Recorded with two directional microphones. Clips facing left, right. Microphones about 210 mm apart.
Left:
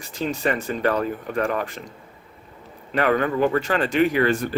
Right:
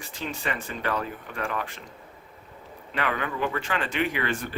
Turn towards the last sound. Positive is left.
turn(degrees=40)  # may be behind; listen again after turning